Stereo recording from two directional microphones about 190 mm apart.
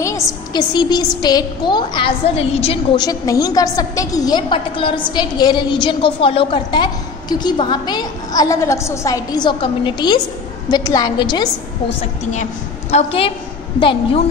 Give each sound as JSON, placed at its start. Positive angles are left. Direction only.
{"t": 0.0, "sound": "a woman's voice", "side_deg": 15}
{"t": 12.0, "sound": "a woman's voice", "side_deg": 40}
{"t": 12.9, "sound": "a woman's voice", "side_deg": 30}